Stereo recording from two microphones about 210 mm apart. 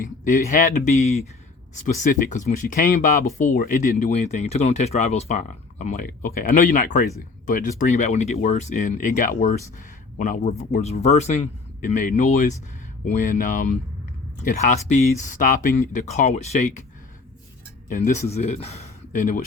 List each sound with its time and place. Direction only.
0.3 s speech: 40° left (ahead or behind)
17.8 s speech: 40° left (ahead or behind)